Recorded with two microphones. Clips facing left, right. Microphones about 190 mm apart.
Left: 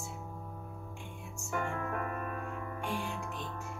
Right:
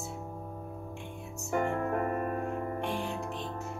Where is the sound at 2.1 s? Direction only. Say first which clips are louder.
Right 7 dB; 35° right (ahead or behind).